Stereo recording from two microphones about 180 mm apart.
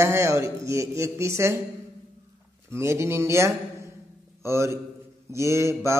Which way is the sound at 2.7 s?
15° right (ahead or behind).